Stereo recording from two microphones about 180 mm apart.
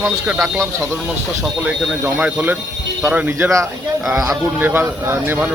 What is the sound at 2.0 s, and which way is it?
Speech, 10° right (ahead or behind).